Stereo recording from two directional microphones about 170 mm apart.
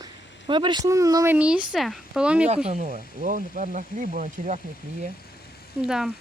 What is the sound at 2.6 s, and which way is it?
Speech, 45° right (ahead or behind).